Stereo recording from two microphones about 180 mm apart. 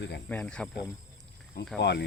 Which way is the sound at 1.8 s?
70° left (ahead or behind).